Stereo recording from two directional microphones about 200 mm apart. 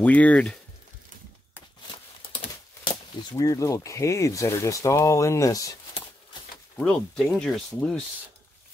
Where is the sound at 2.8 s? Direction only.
20° left (ahead or behind).